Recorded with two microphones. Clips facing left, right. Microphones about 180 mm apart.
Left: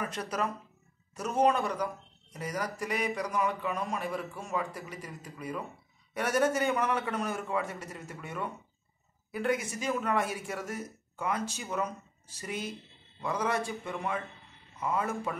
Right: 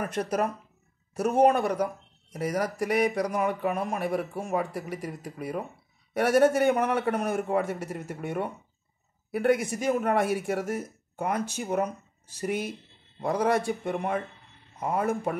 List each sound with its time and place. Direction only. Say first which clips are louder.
0.0 s speech: right 6 dB; 55° right (ahead or behind)
3.3 s speech: right 4 dB; 50° right (ahead or behind)
6.1 s speech: right 7 dB; 60° right (ahead or behind)
7.3 s a man's voice: right 7 dB; 40° right (ahead or behind)
8.1 s a man's voice: right 6 dB; 65° right (ahead or behind)
13.8 s speech: right 6 dB; 45° right (ahead or behind)